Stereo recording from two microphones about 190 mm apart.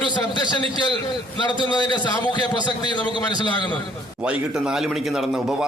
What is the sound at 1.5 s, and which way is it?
A man's voice, 25° left (ahead or behind).